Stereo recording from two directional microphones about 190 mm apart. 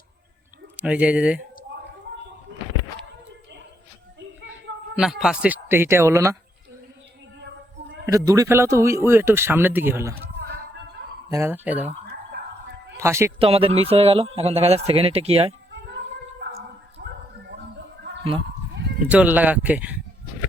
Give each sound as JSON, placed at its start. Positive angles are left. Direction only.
{"t": 0.8, "sound": "speech", "side_deg": -5}
{"t": 4.9, "sound": "speech", "side_deg": -5}
{"t": 8.0, "sound": "speech", "side_deg": -20}
{"t": 11.3, "sound": "speech", "side_deg": -15}
{"t": 12.0, "sound": "whispering", "side_deg": -60}
{"t": 13.0, "sound": "speech", "side_deg": -15}
{"t": 13.4, "sound": "a man's voice", "side_deg": -30}
{"t": 16.4, "sound": "dog", "side_deg": -65}
{"t": 17.0, "sound": "a sound", "side_deg": -55}
{"t": 19.0, "sound": "speech", "side_deg": -10}